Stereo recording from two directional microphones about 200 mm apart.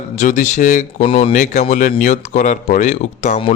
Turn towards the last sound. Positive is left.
turn(degrees=35)  # may be behind; listen again after turning